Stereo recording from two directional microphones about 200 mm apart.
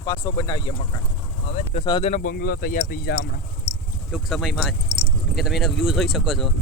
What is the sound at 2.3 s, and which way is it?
Speech, 50° left (ahead or behind).